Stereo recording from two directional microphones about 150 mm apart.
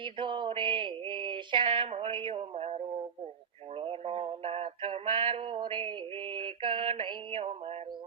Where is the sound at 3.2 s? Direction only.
40° right (ahead or behind).